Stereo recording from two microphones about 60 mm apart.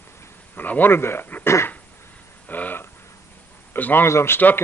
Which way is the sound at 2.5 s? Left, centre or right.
Left.